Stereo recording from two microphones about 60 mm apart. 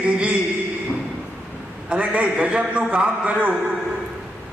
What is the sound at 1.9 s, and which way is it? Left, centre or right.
A man's voice, right.